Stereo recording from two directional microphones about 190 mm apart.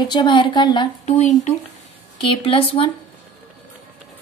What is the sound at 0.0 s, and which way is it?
Speech, 25° left (ahead or behind).